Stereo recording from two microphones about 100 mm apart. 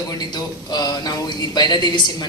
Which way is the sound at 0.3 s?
40° left (ahead or behind).